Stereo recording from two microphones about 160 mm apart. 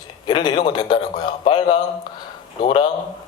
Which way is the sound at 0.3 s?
30° left (ahead or behind).